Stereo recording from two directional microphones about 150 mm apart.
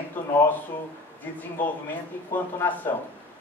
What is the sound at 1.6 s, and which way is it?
A man's voice, 10° left (ahead or behind).